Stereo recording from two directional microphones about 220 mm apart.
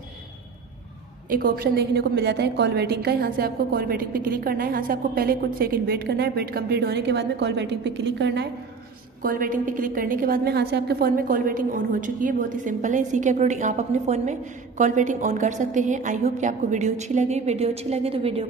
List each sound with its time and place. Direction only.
1.3 s a woman's voice: 40° right (ahead or behind)
9.2 s a woman's voice: 40° right (ahead or behind)